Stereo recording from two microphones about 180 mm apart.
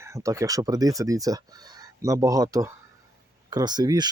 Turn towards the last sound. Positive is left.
turn(degrees=-25)  # may be behind; listen again after turning